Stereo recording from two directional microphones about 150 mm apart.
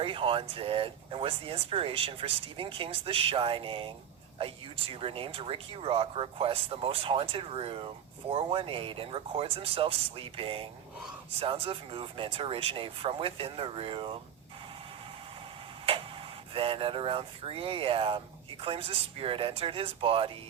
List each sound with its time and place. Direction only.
0.0 s speech: 35° right (ahead or behind)
16.6 s speech: 35° right (ahead or behind)